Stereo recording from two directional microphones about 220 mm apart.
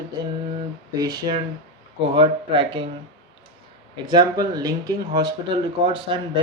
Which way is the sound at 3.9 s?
20° right (ahead or behind).